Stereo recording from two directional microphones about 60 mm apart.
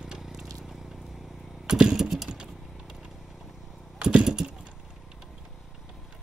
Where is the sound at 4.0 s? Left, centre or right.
Right.